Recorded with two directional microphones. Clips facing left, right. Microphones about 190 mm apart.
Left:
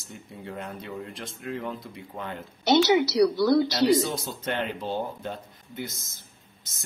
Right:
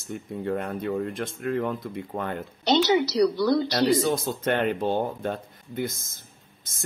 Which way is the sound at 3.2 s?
5° left (ahead or behind).